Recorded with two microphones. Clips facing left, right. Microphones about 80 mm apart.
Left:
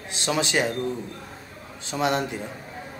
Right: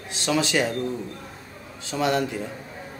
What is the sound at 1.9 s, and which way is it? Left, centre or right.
Speech, left.